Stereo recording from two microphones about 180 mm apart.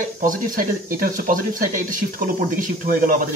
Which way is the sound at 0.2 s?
50° right (ahead or behind).